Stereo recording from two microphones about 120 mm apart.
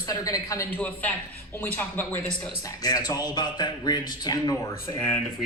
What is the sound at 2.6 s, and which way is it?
A man's voice, 30° left (ahead or behind).